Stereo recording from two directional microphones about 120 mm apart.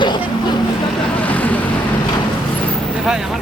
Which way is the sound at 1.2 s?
10° left (ahead or behind).